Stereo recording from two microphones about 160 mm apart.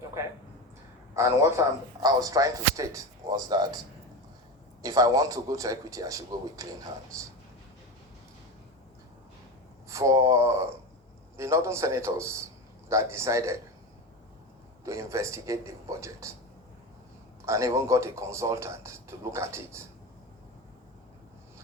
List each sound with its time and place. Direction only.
1.1 s speech: 15° right (ahead or behind)
4.8 s speech: 25° right (ahead or behind)
9.9 s a man's voice: 20° right (ahead or behind)
14.8 s speech: 20° right (ahead or behind)
17.4 s a man's voice: 20° right (ahead or behind)